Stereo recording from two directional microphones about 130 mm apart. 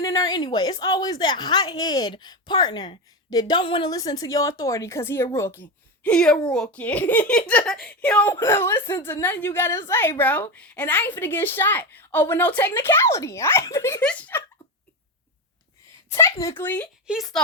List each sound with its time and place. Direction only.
0.0 s a woman's voice: 25° left (ahead or behind)
14.0 s a child's voice: 10° left (ahead or behind)
16.1 s a child's voice: 20° left (ahead or behind)
17.1 s speech: centre (ahead or behind)